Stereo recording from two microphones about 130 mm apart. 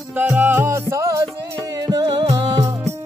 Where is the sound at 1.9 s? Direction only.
35° right (ahead or behind).